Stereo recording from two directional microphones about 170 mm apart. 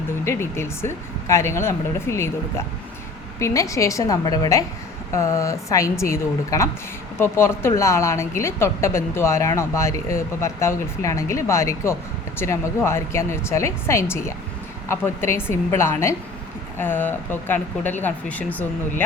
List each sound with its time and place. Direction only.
0.3 s speech: 15° left (ahead or behind)
3.3 s a woman's voice: 20° left (ahead or behind)